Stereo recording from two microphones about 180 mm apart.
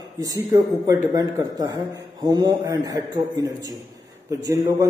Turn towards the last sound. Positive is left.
turn(degrees=-15)  # may be behind; listen again after turning